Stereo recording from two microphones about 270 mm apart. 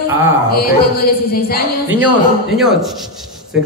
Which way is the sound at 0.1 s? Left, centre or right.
Centre.